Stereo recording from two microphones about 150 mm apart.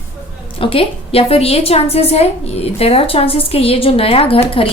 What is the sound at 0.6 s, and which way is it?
A woman's voice, 40° left (ahead or behind).